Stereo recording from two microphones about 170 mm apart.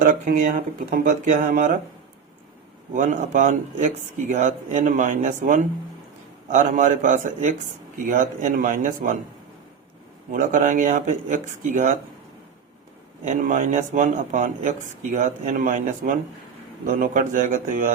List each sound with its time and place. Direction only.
0.0 s a man's voice: 50° right (ahead or behind)
2.9 s a man's voice: 50° right (ahead or behind)
10.3 s a man's voice: 50° right (ahead or behind)
13.2 s a man's voice: 45° right (ahead or behind)